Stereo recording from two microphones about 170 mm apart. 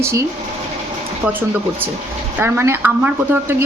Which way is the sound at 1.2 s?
10° right (ahead or behind).